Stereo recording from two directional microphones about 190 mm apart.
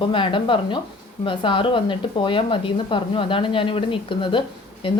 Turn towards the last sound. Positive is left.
turn(degrees=25)  # may be behind; listen again after turning